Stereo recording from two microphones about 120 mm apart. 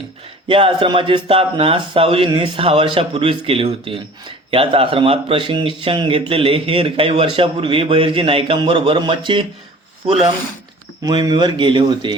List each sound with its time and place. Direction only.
0.4 s a man's voice: 45° right (ahead or behind)
11.0 s speech: 35° right (ahead or behind)